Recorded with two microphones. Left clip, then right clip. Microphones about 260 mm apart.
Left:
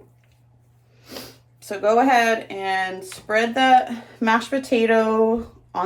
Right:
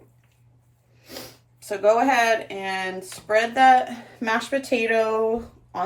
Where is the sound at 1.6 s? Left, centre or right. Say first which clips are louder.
Left 1 dB; centre.